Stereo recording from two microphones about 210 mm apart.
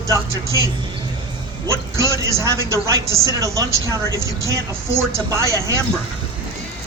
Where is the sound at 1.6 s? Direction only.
15° right (ahead or behind).